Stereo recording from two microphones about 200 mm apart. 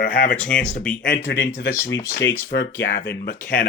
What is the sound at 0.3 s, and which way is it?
Speech, 5° left (ahead or behind).